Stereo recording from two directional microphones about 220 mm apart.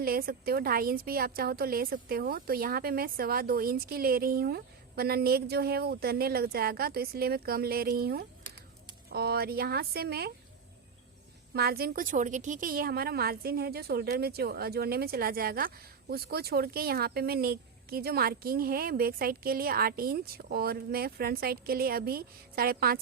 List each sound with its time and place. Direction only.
0.0 s a woman's voice: 40° right (ahead or behind)
11.5 s a woman's voice: 45° right (ahead or behind)